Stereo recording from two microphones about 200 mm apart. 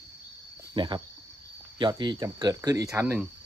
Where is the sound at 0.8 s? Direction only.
25° right (ahead or behind).